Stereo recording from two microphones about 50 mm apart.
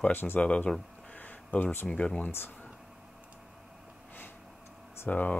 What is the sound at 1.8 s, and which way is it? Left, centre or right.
Speech, left.